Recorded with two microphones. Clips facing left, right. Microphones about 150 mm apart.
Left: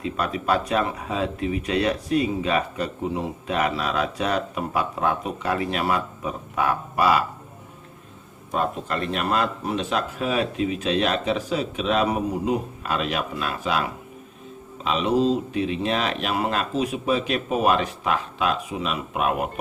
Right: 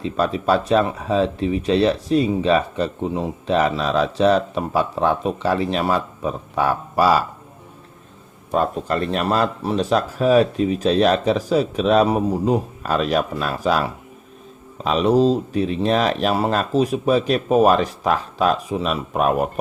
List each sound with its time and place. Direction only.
0.0 s speech: 30° right (ahead or behind)
8.5 s speech: 40° right (ahead or behind)